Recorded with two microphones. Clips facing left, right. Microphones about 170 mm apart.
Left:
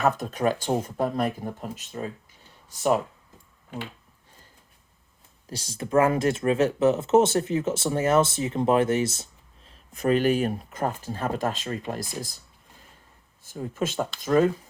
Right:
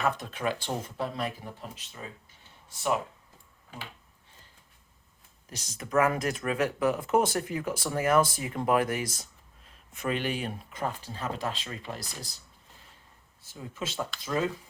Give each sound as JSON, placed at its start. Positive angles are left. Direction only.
{"t": 0.0, "sound": "speech", "side_deg": 45}
{"t": 5.5, "sound": "speech", "side_deg": 30}
{"t": 13.5, "sound": "speech", "side_deg": 50}